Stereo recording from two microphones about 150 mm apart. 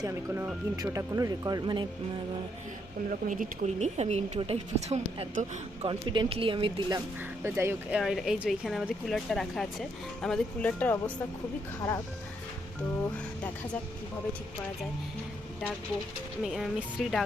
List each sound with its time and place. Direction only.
0.0 s speech: 15° right (ahead or behind)
3.2 s speech: 55° right (ahead or behind)
5.3 s speech: 55° right (ahead or behind)
5.9 s speech: 35° right (ahead or behind)
7.4 s speech: 15° right (ahead or behind)
7.9 s speech: centre (ahead or behind)
16.4 s speech: centre (ahead or behind)